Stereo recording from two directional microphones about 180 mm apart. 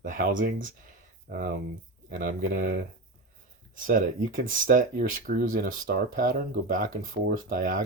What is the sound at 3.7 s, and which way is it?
Speech, 50° right (ahead or behind).